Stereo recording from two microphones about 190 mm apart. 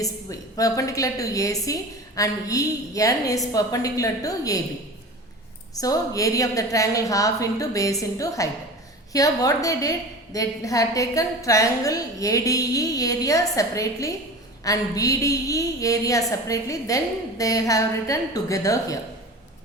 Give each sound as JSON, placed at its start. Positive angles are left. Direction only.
{"t": 0.0, "sound": "a woman's voice", "side_deg": 20}
{"t": 5.7, "sound": "a woman's voice", "side_deg": 20}